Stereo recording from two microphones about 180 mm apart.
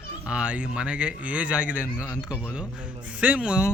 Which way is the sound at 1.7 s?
10° left (ahead or behind).